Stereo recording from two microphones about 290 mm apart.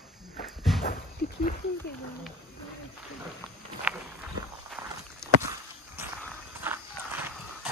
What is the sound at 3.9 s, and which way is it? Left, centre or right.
Speech, centre.